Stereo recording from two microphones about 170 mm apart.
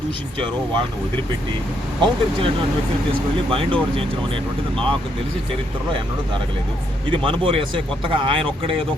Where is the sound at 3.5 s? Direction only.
30° right (ahead or behind).